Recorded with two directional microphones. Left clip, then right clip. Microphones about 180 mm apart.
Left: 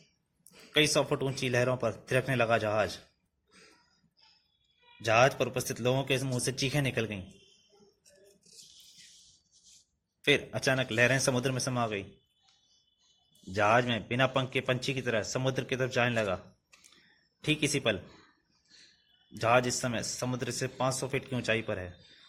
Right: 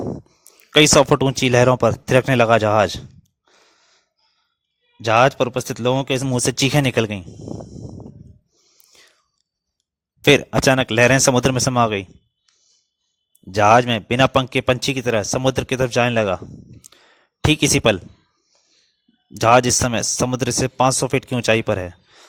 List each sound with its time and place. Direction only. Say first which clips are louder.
0.7 s a man's voice: right 14 dB; 45° right (ahead or behind)
5.0 s a man's voice: right 10 dB; 40° right (ahead or behind)
10.2 s a man's voice: right 13 dB; 50° right (ahead or behind)
13.5 s a man's voice: right 13 dB; 50° right (ahead or behind)
17.4 s a man's voice: right 13 dB; 55° right (ahead or behind)
19.3 s a man's voice: right 13 dB; 50° right (ahead or behind)